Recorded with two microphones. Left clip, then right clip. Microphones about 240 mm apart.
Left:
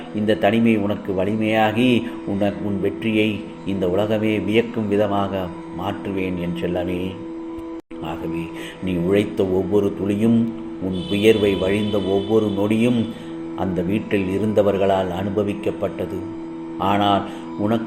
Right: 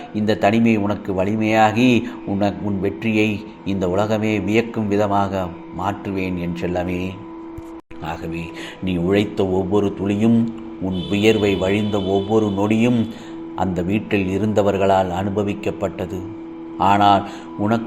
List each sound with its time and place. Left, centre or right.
0.3 s speech: right
6.6 s speech: right
8.0 s speech: right
16.8 s speech: centre